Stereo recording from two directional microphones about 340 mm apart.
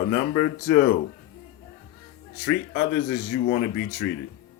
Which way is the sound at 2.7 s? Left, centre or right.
Left.